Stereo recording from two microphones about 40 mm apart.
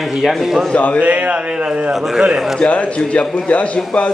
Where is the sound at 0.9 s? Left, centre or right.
Right.